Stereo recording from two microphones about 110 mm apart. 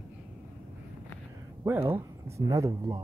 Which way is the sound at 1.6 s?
20° right (ahead or behind).